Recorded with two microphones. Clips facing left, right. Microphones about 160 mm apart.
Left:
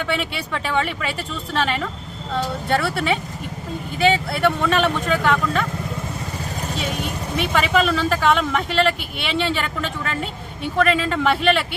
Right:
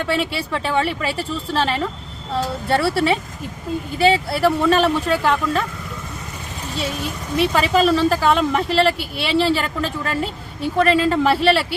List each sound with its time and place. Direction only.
0.3 s speech: 30° right (ahead or behind)
6.7 s speech: 35° right (ahead or behind)